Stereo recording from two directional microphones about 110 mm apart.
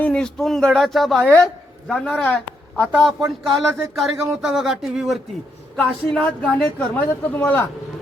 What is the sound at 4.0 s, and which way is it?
Speech, centre (ahead or behind).